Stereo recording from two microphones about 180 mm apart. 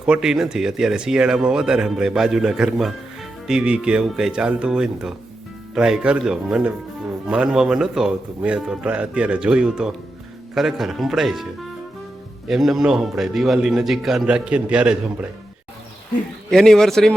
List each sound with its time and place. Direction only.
0.0 s speech: 5° right (ahead or behind)
12.5 s speech: centre (ahead or behind)
16.5 s speech: 5° left (ahead or behind)